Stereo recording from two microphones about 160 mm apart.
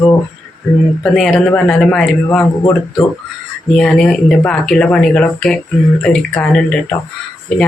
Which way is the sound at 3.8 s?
5° left (ahead or behind).